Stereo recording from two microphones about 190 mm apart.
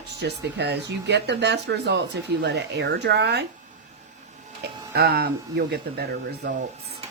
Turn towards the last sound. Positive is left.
turn(degrees=-55)  # may be behind; listen again after turning